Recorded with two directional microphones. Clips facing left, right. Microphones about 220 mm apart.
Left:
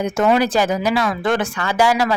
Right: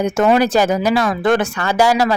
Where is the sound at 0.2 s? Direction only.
45° right (ahead or behind).